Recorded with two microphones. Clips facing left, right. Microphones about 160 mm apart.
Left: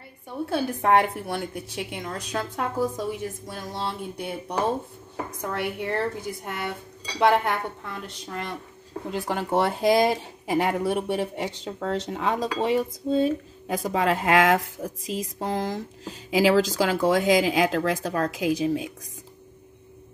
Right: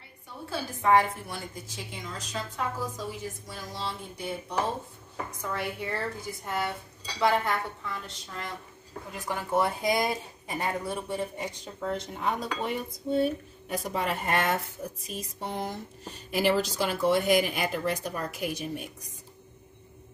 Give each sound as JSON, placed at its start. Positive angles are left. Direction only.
{"t": 0.5, "sound": "a woman's voice", "side_deg": 60}
{"t": 9.1, "sound": "speech", "side_deg": 75}